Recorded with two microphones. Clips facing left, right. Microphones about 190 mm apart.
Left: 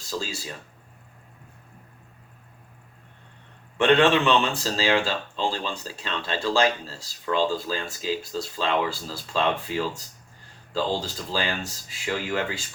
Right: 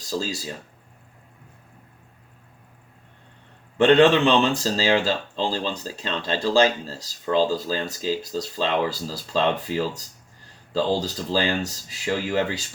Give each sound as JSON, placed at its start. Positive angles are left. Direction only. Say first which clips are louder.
{"t": 0.1, "sound": "speech", "louder": "right 4 dB", "side_deg": -40}
{"t": 3.8, "sound": "speech", "louder": "right 4 dB", "side_deg": -35}
{"t": 11.0, "sound": "speech", "louder": "right 5 dB", "side_deg": -40}